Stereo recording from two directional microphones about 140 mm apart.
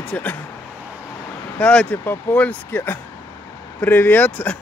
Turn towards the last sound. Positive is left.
turn(degrees=10)  # may be behind; listen again after turning